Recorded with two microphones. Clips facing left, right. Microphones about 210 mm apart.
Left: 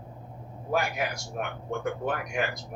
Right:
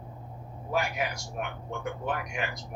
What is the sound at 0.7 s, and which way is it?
Speech, 45° left (ahead or behind).